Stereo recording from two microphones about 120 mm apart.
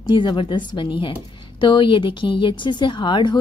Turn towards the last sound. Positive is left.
turn(degrees=40)  # may be behind; listen again after turning